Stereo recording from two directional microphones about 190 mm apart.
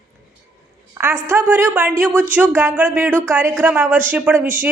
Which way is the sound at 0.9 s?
15° right (ahead or behind).